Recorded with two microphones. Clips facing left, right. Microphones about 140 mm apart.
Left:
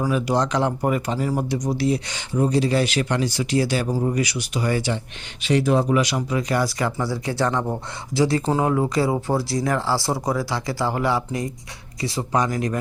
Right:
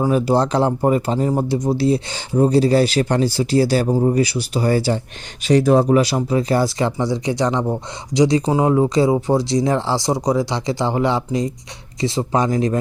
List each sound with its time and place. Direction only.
0.0 s speech: 35° right (ahead or behind)